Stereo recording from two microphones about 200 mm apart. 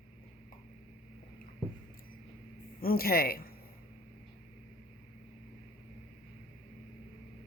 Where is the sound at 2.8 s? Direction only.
50° left (ahead or behind).